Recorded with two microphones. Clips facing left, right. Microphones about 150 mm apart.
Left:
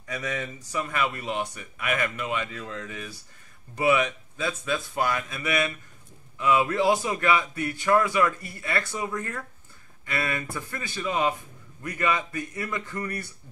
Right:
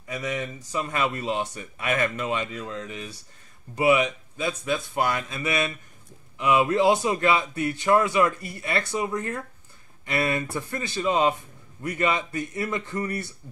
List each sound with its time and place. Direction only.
0.0 s speech: 20° right (ahead or behind)
0.7 s speech: 30° right (ahead or behind)